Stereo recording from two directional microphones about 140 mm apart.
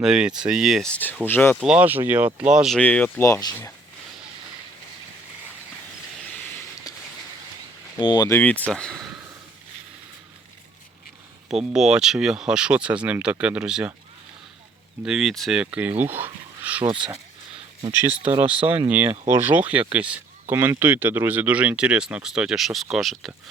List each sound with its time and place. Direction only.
0.0 s speech: 5° right (ahead or behind)
0.9 s speech: 10° left (ahead or behind)
1.6 s speech: 10° right (ahead or behind)
2.7 s speech: 10° left (ahead or behind)
6.9 s a sound: 25° left (ahead or behind)
7.9 s speech: 30° left (ahead or behind)
8.3 s speech: 10° left (ahead or behind)
11.4 s speech: 5° right (ahead or behind)
15.0 s speech: centre (ahead or behind)
16.8 s speech: 35° right (ahead or behind)
18.2 s speech: 50° right (ahead or behind)
18.9 s speech: 10° right (ahead or behind)